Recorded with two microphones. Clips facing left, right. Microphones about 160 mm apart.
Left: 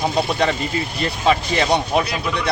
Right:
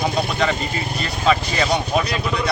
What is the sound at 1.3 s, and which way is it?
Speech, 25° left (ahead or behind).